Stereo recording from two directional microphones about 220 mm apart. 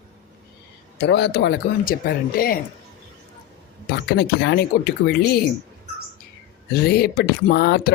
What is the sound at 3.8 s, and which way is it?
Speech, 45° left (ahead or behind).